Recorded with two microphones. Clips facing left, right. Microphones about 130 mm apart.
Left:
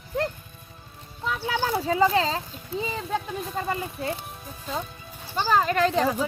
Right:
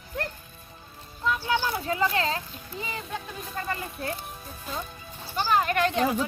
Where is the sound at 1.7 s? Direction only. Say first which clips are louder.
Left 5 dB; 30° left (ahead or behind).